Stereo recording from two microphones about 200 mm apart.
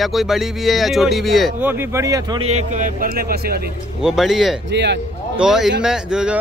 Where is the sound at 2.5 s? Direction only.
35° right (ahead or behind).